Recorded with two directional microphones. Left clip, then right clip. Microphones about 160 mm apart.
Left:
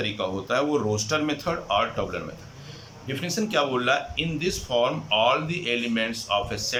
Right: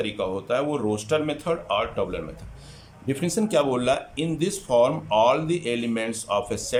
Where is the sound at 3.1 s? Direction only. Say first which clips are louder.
Right 3 dB; 35° right (ahead or behind).